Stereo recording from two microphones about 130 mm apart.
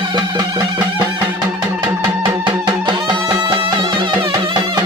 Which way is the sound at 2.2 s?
35° right (ahead or behind).